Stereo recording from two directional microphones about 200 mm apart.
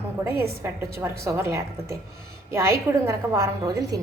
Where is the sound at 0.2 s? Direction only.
10° right (ahead or behind).